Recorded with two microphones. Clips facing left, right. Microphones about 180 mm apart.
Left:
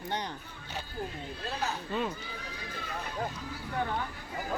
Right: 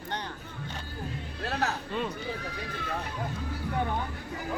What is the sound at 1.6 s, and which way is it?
Speech, 70° right (ahead or behind).